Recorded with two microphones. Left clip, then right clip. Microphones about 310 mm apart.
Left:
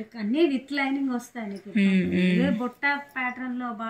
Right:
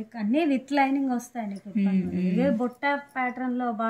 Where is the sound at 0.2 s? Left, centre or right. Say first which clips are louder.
Left 1 dB; centre.